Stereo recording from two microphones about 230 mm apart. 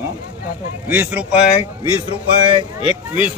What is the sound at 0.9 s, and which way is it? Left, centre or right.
Speech, centre.